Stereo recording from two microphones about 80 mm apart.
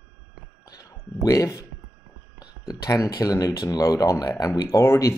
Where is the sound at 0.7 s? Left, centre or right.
Left.